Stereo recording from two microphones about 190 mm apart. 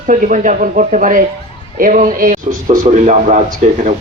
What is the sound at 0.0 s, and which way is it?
A man's voice, 45° right (ahead or behind).